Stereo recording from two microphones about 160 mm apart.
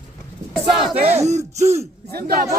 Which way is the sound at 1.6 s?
15° right (ahead or behind).